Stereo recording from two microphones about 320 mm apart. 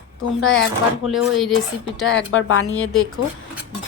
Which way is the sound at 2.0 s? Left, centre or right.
Left.